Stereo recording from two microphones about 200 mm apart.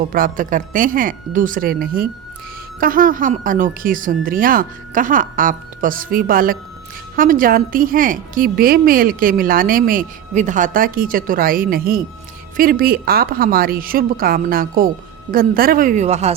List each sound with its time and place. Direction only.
0.1 s a woman's voice: 45° right (ahead or behind)